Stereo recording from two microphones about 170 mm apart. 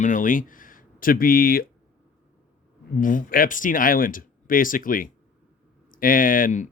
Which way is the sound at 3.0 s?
50° left (ahead or behind).